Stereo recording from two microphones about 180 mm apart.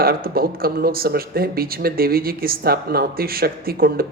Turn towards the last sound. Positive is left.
turn(degrees=-55)  # may be behind; listen again after turning